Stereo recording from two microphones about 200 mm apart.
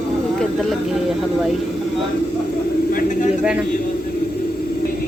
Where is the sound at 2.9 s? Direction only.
40° left (ahead or behind).